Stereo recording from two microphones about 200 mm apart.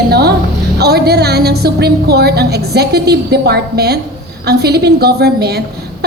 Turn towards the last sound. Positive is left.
turn(degrees=-55)  # may be behind; listen again after turning